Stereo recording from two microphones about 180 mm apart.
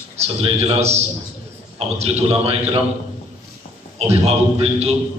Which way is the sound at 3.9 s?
35° right (ahead or behind).